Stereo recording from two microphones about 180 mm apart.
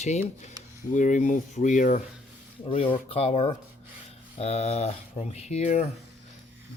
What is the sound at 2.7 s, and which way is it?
Speech, 30° left (ahead or behind).